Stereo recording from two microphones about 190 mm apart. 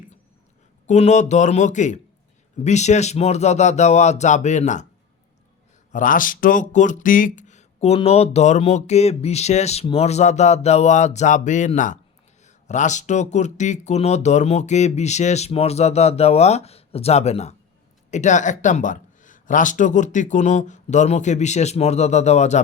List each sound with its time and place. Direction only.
0.9 s speech: 35° left (ahead or behind)
5.9 s speech: 45° left (ahead or behind)